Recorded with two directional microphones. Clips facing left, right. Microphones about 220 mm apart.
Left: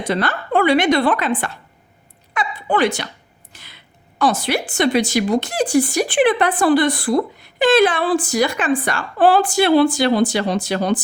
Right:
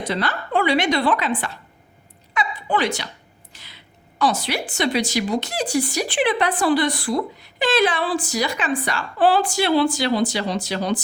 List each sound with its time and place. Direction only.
0.0 s speech: 50° left (ahead or behind)
3.5 s a sound: 55° left (ahead or behind)
4.2 s speech: 50° left (ahead or behind)